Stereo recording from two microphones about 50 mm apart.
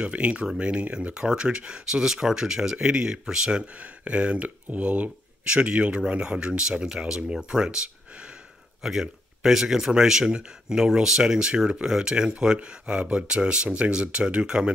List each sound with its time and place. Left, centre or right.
0.0 s speech: right